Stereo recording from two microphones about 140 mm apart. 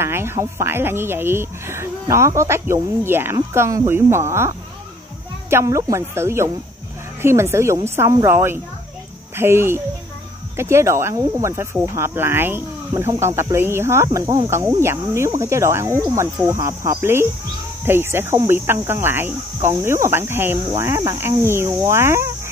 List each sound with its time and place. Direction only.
0.0 s speech: 15° right (ahead or behind)